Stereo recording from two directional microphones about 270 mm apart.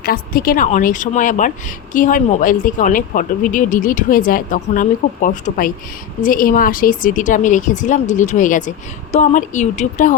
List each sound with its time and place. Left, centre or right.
0.0 s a woman's voice: left